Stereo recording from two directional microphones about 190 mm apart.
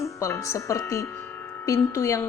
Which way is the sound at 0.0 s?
15° left (ahead or behind).